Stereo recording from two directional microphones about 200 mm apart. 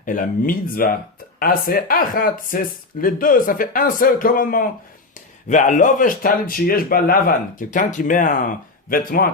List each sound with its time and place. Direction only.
0.0 s speech: 40° left (ahead or behind)